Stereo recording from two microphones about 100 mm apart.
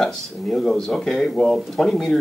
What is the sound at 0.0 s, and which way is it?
Speech, 5° left (ahead or behind).